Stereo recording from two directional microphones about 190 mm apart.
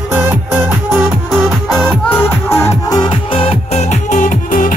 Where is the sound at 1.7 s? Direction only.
5° left (ahead or behind); by 4.8 s 45° left (ahead or behind).